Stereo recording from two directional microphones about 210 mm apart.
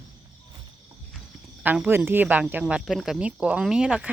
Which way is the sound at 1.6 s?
10° right (ahead or behind).